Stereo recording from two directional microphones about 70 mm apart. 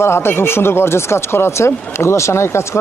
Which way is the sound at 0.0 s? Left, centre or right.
Left.